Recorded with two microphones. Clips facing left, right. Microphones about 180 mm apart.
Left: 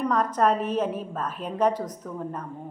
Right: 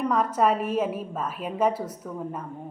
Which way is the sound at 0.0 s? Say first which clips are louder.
Even; 10° right (ahead or behind).